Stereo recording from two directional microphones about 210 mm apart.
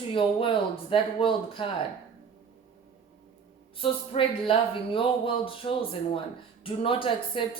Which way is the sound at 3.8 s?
25° left (ahead or behind).